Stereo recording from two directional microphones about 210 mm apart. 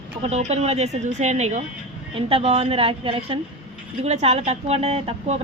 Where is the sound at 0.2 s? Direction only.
30° right (ahead or behind).